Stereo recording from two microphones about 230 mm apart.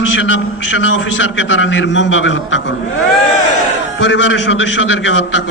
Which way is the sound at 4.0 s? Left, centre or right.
Left.